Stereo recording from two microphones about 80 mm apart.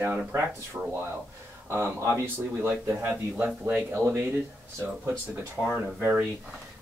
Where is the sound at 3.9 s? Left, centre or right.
Right.